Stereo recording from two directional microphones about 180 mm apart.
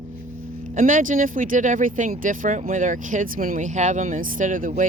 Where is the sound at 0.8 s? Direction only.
45° right (ahead or behind).